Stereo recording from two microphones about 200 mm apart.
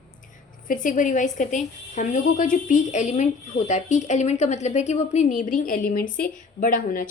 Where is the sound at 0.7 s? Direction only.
40° left (ahead or behind).